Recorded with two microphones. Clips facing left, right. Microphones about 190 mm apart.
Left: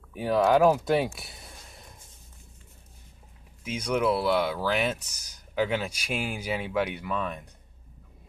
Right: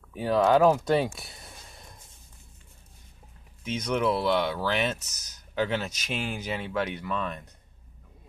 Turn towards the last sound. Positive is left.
turn(degrees=10)  # may be behind; listen again after turning